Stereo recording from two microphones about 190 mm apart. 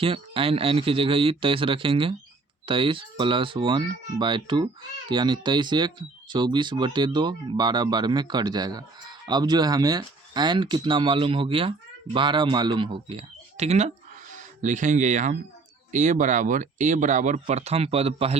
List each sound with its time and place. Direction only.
0.0 s speech: 30° right (ahead or behind)